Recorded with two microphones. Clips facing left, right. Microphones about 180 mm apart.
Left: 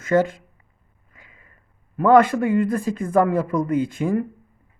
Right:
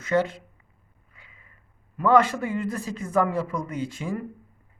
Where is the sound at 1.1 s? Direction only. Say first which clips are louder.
Left 4 dB; 45° left (ahead or behind).